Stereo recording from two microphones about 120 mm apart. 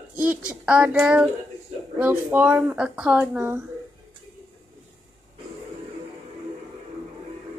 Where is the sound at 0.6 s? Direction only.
10° right (ahead or behind).